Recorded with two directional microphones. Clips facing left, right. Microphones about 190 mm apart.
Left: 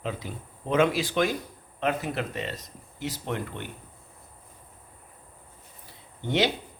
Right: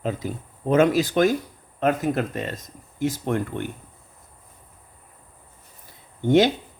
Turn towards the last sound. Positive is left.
turn(degrees=-45)  # may be behind; listen again after turning